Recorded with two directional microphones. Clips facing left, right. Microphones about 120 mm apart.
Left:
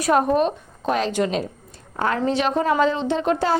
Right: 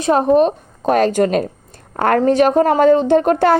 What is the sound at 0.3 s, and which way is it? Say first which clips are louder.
A woman's voice: right 7 dB; 45° right (ahead or behind).